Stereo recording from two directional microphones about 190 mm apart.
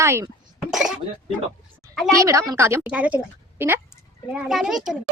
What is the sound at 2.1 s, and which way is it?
Speech, 15° right (ahead or behind).